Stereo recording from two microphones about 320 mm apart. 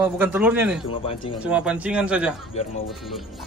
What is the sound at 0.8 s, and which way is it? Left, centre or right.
Speech, centre.